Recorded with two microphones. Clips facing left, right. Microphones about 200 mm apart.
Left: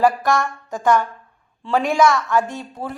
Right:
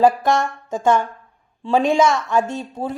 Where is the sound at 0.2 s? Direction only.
20° right (ahead or behind).